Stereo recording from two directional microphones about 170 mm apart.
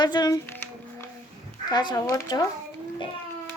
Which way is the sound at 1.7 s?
25° left (ahead or behind).